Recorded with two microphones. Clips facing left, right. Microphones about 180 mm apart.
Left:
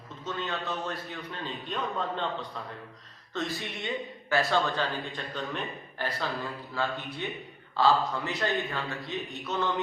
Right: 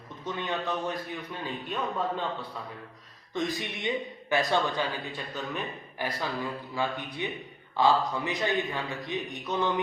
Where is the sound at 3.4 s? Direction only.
15° right (ahead or behind).